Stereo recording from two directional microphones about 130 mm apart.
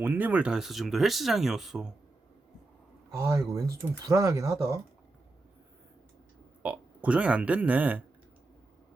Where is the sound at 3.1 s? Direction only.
25° right (ahead or behind).